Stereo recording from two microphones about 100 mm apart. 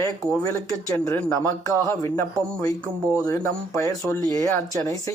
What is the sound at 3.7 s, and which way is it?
Speech, 30° left (ahead or behind).